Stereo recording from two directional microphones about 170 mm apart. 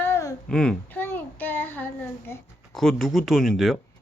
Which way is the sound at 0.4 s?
5° left (ahead or behind).